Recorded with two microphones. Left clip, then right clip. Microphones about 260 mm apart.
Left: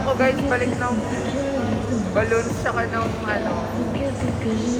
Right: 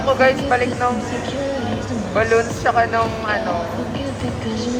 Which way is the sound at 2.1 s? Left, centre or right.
Right.